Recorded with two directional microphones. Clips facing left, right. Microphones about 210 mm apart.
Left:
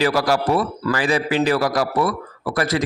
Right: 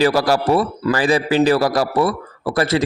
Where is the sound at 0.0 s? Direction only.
30° right (ahead or behind).